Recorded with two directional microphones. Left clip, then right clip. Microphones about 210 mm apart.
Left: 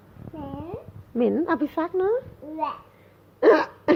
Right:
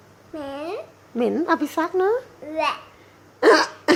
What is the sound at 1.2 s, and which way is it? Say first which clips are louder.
A woman's voice: right 2 dB; 5° right (ahead or behind).